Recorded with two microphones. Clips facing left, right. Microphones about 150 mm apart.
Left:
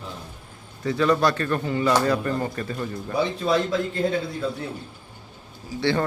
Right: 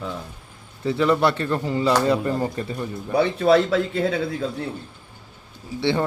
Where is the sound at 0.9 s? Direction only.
20° right (ahead or behind).